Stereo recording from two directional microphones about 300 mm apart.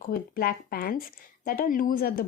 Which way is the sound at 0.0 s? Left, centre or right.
Left.